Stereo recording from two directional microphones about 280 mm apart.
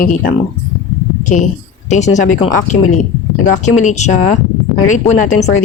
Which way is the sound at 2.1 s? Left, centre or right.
Left.